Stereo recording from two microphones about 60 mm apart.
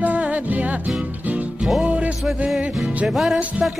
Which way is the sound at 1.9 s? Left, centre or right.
Right.